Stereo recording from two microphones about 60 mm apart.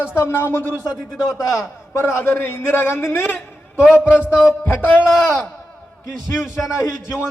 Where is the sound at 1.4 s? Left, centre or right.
Left.